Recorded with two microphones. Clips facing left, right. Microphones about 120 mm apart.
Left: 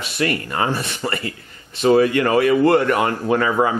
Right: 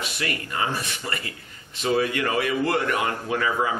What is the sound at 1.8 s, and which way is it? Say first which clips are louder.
Speech: left 8 dB; 50° left (ahead or behind).